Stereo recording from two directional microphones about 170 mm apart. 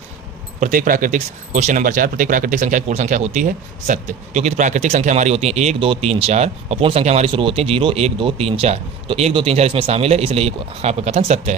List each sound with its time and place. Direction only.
0.6 s speech: 55° right (ahead or behind)